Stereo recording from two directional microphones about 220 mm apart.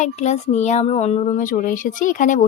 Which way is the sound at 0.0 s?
30° left (ahead or behind).